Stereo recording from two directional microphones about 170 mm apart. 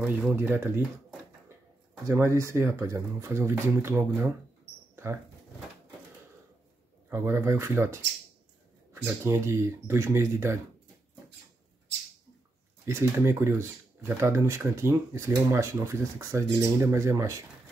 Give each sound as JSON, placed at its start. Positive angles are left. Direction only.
{"t": 0.0, "sound": "speech", "side_deg": -10}
{"t": 2.0, "sound": "speech", "side_deg": -15}
{"t": 7.1, "sound": "speech", "side_deg": -15}
{"t": 12.8, "sound": "speech", "side_deg": -15}